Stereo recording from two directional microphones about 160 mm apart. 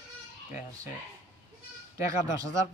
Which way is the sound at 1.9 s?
20° right (ahead or behind).